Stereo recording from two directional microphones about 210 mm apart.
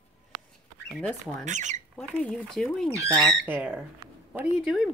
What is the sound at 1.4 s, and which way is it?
Speech, 35° right (ahead or behind).